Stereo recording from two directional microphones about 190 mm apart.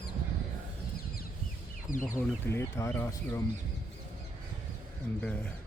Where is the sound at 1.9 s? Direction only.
45° left (ahead or behind).